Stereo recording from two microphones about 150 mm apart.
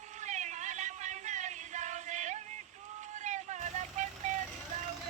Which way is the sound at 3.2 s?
50° right (ahead or behind).